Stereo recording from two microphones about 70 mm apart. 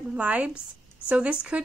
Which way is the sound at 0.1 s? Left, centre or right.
Right.